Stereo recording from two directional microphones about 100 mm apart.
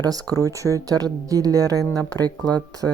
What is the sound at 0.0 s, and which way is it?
Speech, 40° right (ahead or behind).